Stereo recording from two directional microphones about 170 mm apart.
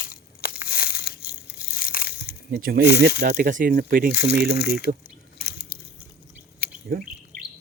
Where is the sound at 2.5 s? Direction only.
60° right (ahead or behind).